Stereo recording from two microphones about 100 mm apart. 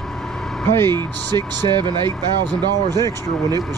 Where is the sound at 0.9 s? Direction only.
45° right (ahead or behind).